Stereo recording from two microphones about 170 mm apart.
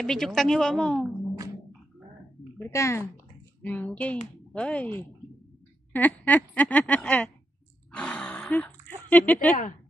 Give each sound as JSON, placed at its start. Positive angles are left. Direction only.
{"t": 0.0, "sound": "a woman's voice", "side_deg": 5}
{"t": 2.6, "sound": "speech", "side_deg": 15}
{"t": 7.9, "sound": "a sound", "side_deg": 10}
{"t": 9.1, "sound": "speech", "side_deg": 5}